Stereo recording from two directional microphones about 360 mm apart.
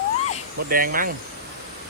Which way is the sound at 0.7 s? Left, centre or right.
Right.